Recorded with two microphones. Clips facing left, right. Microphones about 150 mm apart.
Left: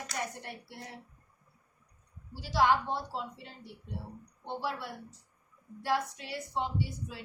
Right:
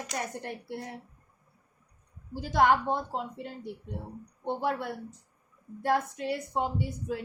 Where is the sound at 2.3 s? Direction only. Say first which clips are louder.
Right 3 dB; 50° right (ahead or behind).